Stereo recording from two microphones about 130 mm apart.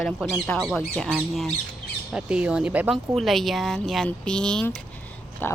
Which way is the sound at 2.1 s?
5° right (ahead or behind).